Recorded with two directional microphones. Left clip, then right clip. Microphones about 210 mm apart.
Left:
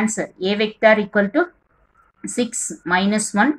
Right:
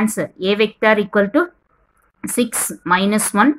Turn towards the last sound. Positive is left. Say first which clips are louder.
# right 3 dB
turn(degrees=-55)  # may be behind; listen again after turning